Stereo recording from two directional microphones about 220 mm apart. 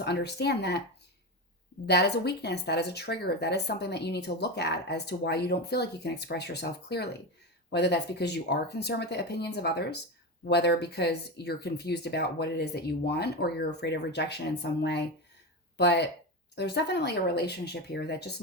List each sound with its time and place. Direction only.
0.0 s speech: 50° left (ahead or behind)
1.9 s speech: 50° left (ahead or behind)